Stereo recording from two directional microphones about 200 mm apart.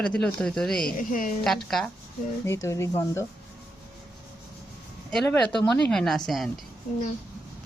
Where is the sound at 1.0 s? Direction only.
40° left (ahead or behind).